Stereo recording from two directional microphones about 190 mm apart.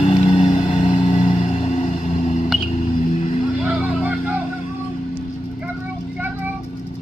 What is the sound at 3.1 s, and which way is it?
Vehicle, 30° left (ahead or behind).